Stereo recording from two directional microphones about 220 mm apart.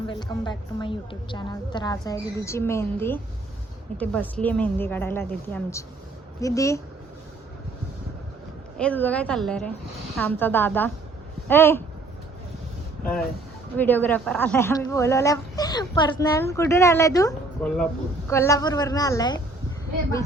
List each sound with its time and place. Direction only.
0.1 s a woman's voice: 20° left (ahead or behind)
8.8 s a woman's voice: 5° left (ahead or behind)
13.7 s speech: 10° left (ahead or behind)